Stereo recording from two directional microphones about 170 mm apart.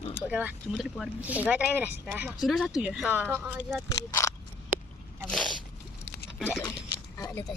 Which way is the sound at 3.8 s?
20° left (ahead or behind).